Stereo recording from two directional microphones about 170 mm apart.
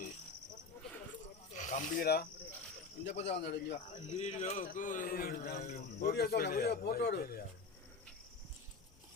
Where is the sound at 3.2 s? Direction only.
85° left.